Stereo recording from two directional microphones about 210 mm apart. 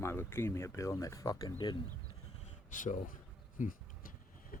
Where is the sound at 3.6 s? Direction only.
40° left (ahead or behind).